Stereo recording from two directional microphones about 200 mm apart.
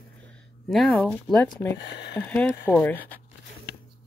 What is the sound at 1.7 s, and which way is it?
Speech, 60° left (ahead or behind).